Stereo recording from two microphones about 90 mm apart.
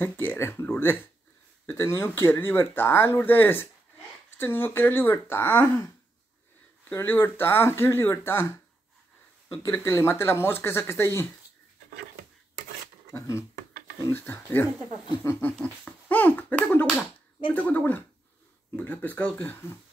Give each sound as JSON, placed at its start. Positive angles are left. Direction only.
{"t": 0.0, "sound": "speech", "side_deg": 20}
{"t": 6.9, "sound": "speech", "side_deg": 25}
{"t": 13.1, "sound": "speech", "side_deg": 30}
{"t": 15.8, "sound": "speech", "side_deg": 15}